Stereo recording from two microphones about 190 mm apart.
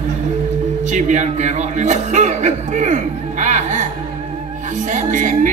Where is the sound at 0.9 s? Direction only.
40° right (ahead or behind).